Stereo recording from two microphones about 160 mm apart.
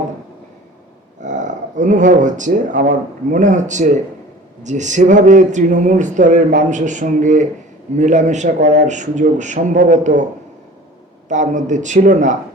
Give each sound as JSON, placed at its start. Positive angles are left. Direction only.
{"t": 1.2, "sound": "speech", "side_deg": -50}
{"t": 11.3, "sound": "speech", "side_deg": -50}